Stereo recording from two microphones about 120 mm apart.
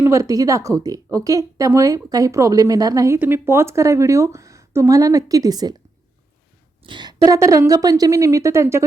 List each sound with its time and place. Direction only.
0.0 s speech: 25° right (ahead or behind)
6.8 s a woman's voice: 40° right (ahead or behind); by 8.8 s 25° right (ahead or behind)